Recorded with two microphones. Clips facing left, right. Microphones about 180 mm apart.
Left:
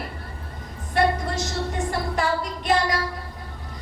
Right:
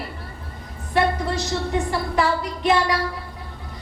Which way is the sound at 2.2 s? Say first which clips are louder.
Right 6 dB; 45° left (ahead or behind).